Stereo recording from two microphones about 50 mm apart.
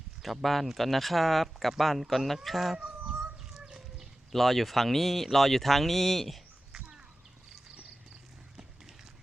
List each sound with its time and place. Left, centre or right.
0.2 s speech: centre
2.7 s chicken: centre
4.3 s speech: centre
6.7 s a sound: centre